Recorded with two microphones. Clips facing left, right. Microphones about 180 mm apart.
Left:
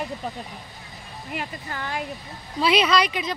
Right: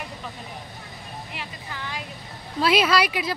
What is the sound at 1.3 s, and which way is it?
Speech, 50° left (ahead or behind).